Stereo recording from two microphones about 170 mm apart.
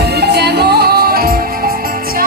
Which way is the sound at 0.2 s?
75° right (ahead or behind).